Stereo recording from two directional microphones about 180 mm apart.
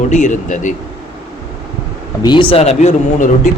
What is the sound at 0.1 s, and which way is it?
Speech, 40° left (ahead or behind).